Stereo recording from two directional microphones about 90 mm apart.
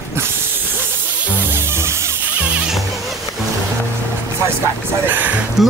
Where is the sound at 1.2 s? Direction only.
20° right (ahead or behind).